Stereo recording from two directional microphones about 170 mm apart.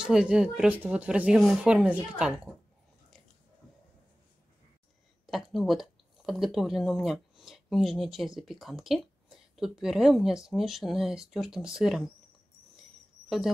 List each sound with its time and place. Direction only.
0.0 s speech: 5° right (ahead or behind)
5.2 s speech: centre (ahead or behind)